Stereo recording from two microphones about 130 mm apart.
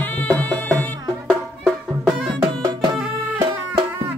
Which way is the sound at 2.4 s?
35° right (ahead or behind).